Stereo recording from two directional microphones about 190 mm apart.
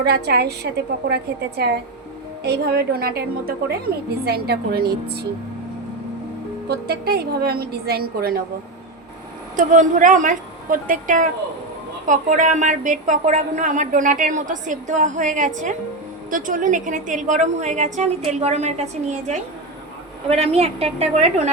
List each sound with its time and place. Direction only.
0.0 s a woman's voice: 60° right (ahead or behind)
6.7 s a woman's voice: 60° right (ahead or behind)
9.6 s a woman's voice: 45° right (ahead or behind)